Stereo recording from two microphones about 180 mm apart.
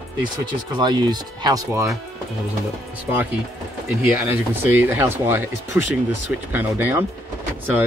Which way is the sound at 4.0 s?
10° right (ahead or behind).